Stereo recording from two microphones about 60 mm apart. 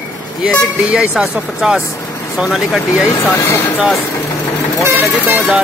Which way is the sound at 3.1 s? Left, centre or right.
Left.